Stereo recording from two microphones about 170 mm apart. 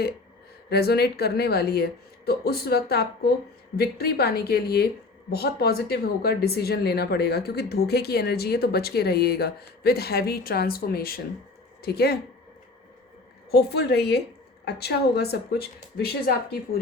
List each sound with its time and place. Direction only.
0.7 s speech: 70° left (ahead or behind)
13.5 s speech: 75° left (ahead or behind)